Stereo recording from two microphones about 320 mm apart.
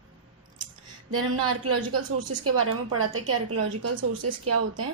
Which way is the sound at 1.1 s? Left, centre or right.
Right.